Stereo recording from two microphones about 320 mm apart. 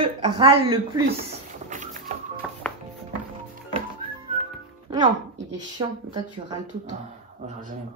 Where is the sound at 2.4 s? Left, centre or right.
Centre.